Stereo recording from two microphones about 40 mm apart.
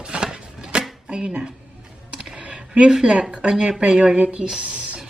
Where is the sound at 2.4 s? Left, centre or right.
Right.